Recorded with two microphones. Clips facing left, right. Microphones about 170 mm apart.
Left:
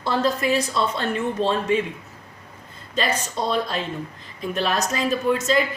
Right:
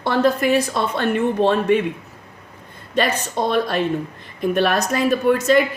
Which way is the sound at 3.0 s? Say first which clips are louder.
Right 4 dB; 60° right (ahead or behind).